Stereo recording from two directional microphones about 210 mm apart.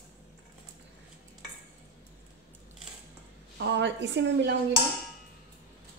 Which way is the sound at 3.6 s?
60° right (ahead or behind).